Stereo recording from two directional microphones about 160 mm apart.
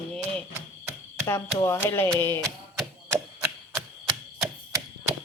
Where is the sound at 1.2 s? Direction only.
15° left (ahead or behind).